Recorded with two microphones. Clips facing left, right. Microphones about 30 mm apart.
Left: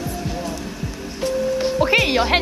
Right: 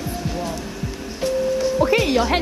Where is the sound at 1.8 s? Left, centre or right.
Left.